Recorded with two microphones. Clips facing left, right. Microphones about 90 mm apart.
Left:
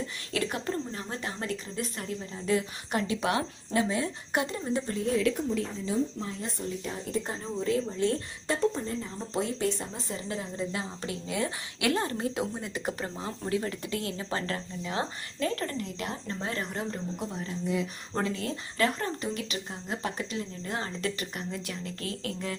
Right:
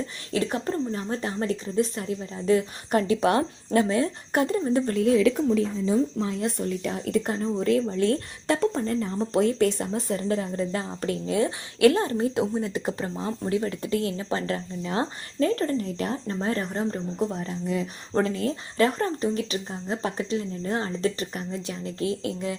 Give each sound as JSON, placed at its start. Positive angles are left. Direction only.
{"t": 0.3, "sound": "speech", "side_deg": -35}
{"t": 6.1, "sound": "speech", "side_deg": -70}